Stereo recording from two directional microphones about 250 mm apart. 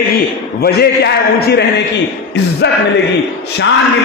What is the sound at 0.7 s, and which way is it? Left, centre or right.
A man's voice, left.